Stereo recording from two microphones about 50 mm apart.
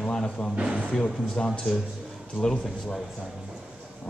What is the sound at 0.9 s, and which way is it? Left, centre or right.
Speech, centre.